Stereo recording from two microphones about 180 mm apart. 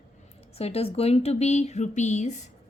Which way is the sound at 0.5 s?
35° left (ahead or behind).